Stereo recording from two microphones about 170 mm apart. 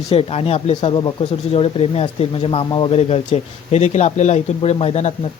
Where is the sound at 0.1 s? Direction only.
35° left (ahead or behind).